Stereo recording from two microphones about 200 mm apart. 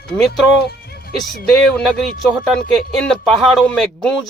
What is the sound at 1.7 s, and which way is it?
Speech, centre (ahead or behind).